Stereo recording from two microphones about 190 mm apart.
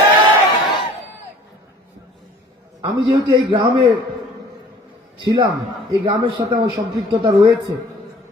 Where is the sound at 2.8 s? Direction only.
25° right (ahead or behind).